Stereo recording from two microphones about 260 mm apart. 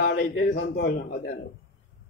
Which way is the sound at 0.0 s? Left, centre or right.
Left.